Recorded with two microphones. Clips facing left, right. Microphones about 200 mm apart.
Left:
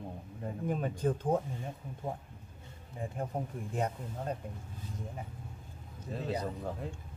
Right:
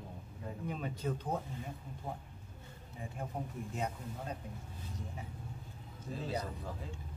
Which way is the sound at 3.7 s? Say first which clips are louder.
Left 6 dB; 50° left (ahead or behind).